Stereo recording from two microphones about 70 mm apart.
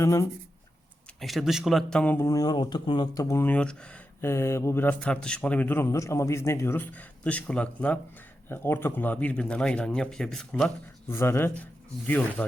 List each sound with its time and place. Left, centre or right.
0.0 s speech: left
1.2 s speech: centre
2.3 s speech: left
3.4 s speech: centre
4.2 s mantra: left
4.9 s speech: centre; by 5.9 s left
5.9 s speech: left
6.9 s speech: left
8.4 s speech: left; by 10.7 s centre
11.1 s mantra: left
11.6 s speech: left